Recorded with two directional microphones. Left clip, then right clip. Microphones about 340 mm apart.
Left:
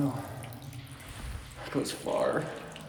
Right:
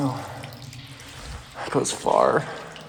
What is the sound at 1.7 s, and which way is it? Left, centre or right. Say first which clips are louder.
Speech: right 9 dB; centre.